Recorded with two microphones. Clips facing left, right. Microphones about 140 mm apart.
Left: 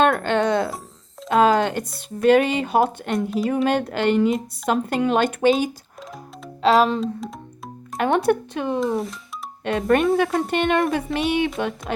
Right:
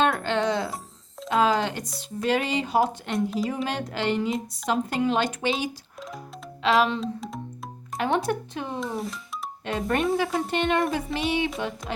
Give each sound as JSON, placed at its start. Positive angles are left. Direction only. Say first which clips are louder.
{"t": 0.0, "sound": "speech", "louder": "left 5 dB", "side_deg": 55}
{"t": 7.0, "sound": "speech", "louder": "left 5 dB", "side_deg": 0}
{"t": 7.9, "sound": "speech", "louder": "left 6 dB", "side_deg": 55}
{"t": 9.6, "sound": "speech", "louder": "left 6 dB", "side_deg": 55}